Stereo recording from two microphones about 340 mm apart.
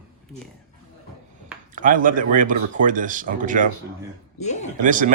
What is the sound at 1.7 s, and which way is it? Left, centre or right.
Speech, right.